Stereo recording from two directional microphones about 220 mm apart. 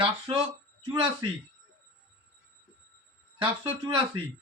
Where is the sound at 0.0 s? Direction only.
25° right (ahead or behind).